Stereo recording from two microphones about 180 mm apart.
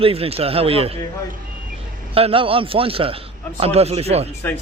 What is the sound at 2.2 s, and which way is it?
A man's voice, 30° right (ahead or behind).